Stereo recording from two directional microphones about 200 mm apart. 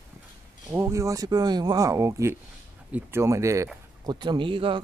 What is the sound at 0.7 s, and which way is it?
Speech, 15° right (ahead or behind).